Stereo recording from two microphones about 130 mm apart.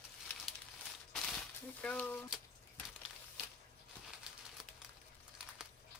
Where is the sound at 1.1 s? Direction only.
5° left (ahead or behind).